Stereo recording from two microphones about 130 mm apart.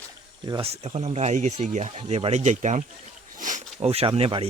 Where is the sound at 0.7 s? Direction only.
55° right (ahead or behind).